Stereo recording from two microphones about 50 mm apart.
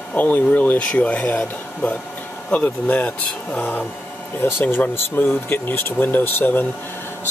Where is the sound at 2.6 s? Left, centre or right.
Left.